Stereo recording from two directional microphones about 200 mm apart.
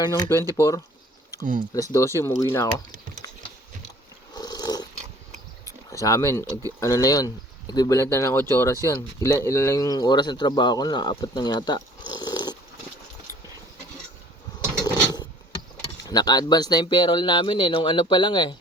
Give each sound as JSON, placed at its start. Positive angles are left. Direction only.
{"t": 0.0, "sound": "speech", "side_deg": 20}
{"t": 4.4, "sound": "dog", "side_deg": 20}
{"t": 5.9, "sound": "speech", "side_deg": 15}
{"t": 16.0, "sound": "speech", "side_deg": 20}